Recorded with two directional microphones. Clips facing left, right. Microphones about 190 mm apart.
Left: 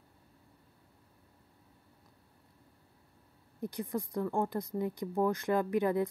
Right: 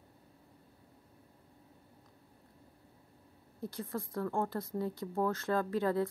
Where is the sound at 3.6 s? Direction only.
15° left (ahead or behind).